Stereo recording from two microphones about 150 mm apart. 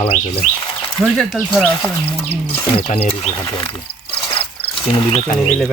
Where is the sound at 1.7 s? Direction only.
30° left (ahead or behind).